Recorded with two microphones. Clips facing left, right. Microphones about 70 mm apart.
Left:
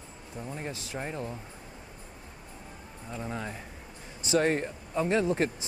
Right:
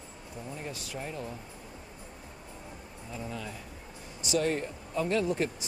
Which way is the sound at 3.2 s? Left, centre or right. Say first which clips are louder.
Left 4 dB; left.